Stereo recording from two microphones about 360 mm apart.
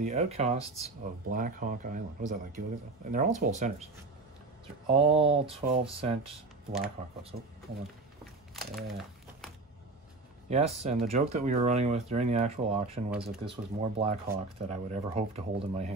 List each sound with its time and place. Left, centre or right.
0.0 s speech: centre
4.9 s speech: centre
8.2 s a sound: centre
10.5 s speech: centre
13.1 s speech: centre
13.9 s speech: centre